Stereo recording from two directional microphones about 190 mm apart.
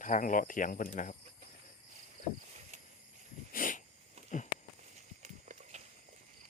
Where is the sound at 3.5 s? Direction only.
45° left (ahead or behind).